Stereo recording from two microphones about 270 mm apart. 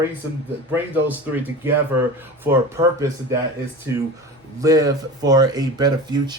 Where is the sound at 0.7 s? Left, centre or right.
Centre.